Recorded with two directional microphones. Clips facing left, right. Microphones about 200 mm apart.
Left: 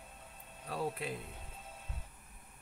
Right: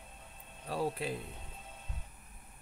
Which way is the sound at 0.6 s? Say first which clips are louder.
Right 3 dB; 35° right (ahead or behind).